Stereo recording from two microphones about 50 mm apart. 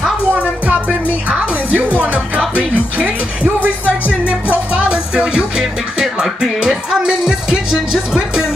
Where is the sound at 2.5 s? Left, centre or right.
Right.